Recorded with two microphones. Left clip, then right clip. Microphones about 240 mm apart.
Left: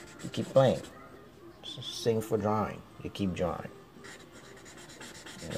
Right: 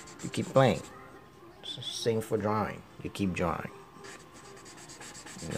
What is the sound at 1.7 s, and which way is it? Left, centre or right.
Speech, centre.